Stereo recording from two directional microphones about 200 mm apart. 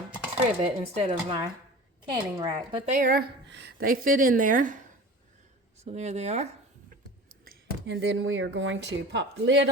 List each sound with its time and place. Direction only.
0.6 s a woman's voice: 30° right (ahead or behind)
2.9 s a woman's voice: 45° right (ahead or behind)
3.5 s a woman's voice: 55° right (ahead or behind)
5.8 s a woman's voice: 30° right (ahead or behind)
7.4 s speech: 60° right (ahead or behind)